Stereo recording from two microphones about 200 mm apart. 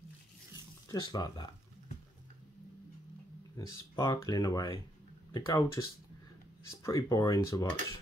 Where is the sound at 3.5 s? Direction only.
20° left (ahead or behind).